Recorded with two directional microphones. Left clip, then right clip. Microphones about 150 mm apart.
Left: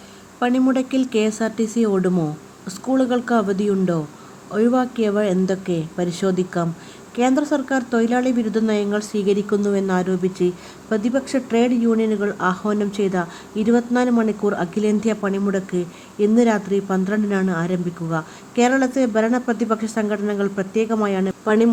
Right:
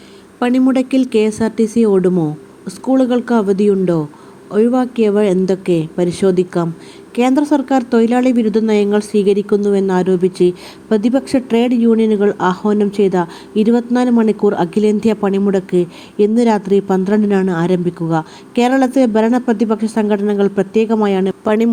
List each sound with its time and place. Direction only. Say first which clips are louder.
0.3 s a woman's voice: right 5 dB; 25° right (ahead or behind)